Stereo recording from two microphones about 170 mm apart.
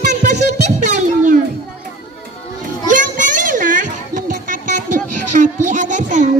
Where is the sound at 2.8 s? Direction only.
50° right (ahead or behind).